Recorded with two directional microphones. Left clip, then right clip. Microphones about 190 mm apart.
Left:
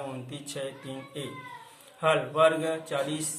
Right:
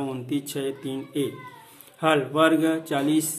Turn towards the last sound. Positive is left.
turn(degrees=-55)  # may be behind; listen again after turning